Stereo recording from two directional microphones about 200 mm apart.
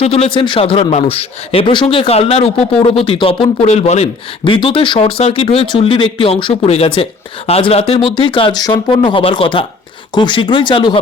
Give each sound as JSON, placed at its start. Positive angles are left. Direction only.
{"t": 0.0, "sound": "speech", "side_deg": 30}